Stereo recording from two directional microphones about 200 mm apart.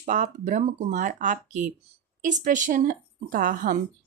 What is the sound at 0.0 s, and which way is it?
Speech, 40° right (ahead or behind).